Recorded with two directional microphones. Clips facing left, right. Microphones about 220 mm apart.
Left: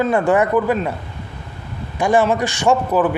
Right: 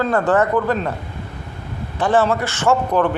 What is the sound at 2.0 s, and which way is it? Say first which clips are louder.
A man's voice: left 1 dB; 10° left (ahead or behind).